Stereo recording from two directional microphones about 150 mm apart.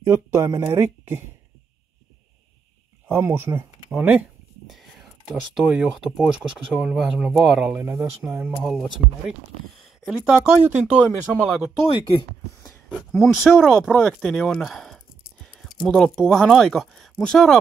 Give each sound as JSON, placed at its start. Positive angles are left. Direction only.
{"t": 0.1, "sound": "speech", "side_deg": -20}
{"t": 3.1, "sound": "speech", "side_deg": -15}
{"t": 5.3, "sound": "speech", "side_deg": -5}
{"t": 7.8, "sound": "speech", "side_deg": -15}
{"t": 8.5, "sound": "speech", "side_deg": 0}
{"t": 11.3, "sound": "speech", "side_deg": 5}
{"t": 12.9, "sound": "speech", "side_deg": 0}